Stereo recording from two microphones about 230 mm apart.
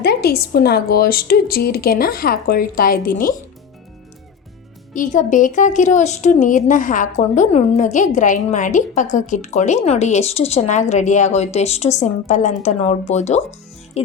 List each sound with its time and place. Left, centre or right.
0.0 s a woman's voice: left
4.9 s a woman's voice: left